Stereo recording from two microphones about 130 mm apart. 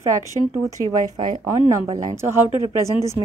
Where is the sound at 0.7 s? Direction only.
25° right (ahead or behind).